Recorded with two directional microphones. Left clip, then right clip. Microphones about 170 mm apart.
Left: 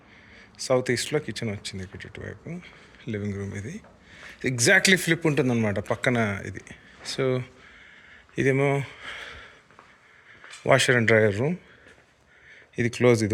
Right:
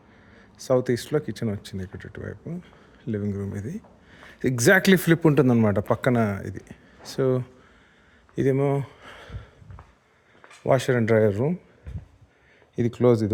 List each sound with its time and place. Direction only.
0.3 s speech: 40° right (ahead or behind)
2.2 s speech: 20° right (ahead or behind)
3.7 s speech: 45° right (ahead or behind)
8.4 s speech: 25° right (ahead or behind)
10.7 s speech: 20° right (ahead or behind)
12.7 s speech: 30° right (ahead or behind)